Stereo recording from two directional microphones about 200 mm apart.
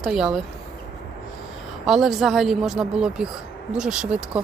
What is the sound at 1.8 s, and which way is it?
Speech, centre (ahead or behind).